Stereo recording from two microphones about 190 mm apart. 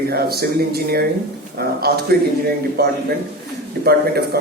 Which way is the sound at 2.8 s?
55° right (ahead or behind).